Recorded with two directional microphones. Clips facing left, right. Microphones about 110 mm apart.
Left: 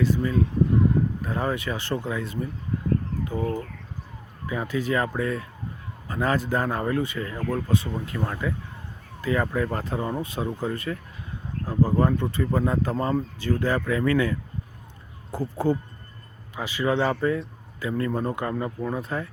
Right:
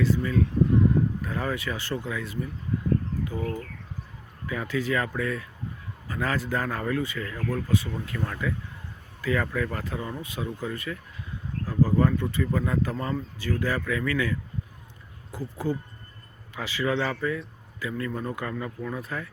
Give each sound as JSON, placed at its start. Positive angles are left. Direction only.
{"t": 0.0, "sound": "speech", "side_deg": 20}
{"t": 16.6, "sound": "speech", "side_deg": 15}